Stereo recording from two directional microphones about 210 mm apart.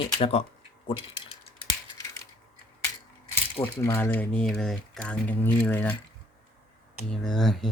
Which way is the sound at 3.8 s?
10° left (ahead or behind).